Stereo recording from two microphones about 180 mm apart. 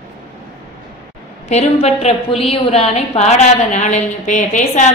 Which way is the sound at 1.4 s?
35° left (ahead or behind).